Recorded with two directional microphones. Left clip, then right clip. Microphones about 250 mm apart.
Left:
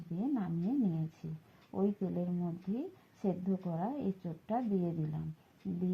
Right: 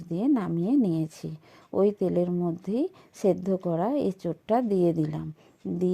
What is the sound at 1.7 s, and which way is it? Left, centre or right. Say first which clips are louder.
Speech: right 13 dB; right.